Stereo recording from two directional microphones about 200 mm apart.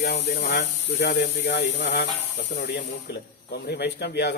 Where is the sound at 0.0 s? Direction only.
55° left (ahead or behind).